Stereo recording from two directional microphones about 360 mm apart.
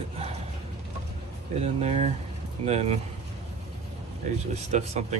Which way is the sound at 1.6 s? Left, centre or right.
Centre.